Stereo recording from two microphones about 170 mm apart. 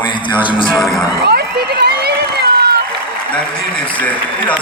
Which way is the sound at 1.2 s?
70° right (ahead or behind).